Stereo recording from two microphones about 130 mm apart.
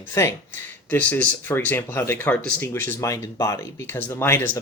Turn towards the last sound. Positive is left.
turn(degrees=20)  # may be behind; listen again after turning